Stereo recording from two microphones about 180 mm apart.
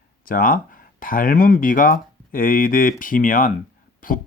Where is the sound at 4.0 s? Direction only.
50° left (ahead or behind).